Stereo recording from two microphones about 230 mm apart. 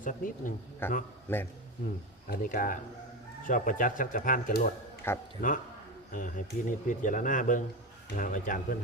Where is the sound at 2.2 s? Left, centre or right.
Left.